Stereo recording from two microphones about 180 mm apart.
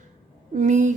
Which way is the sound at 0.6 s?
40° right (ahead or behind).